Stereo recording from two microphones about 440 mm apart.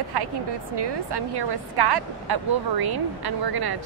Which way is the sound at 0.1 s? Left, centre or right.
Right.